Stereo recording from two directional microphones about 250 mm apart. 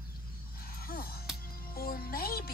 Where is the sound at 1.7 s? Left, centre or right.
Left.